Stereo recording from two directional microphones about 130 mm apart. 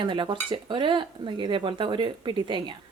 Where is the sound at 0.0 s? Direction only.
40° right (ahead or behind).